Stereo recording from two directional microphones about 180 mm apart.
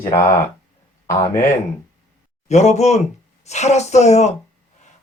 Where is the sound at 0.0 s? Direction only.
15° left (ahead or behind).